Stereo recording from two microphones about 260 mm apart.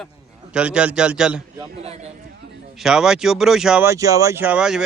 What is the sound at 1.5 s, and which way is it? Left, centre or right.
Speech, right.